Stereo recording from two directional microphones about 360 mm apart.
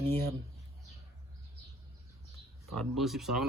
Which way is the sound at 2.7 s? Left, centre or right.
Centre.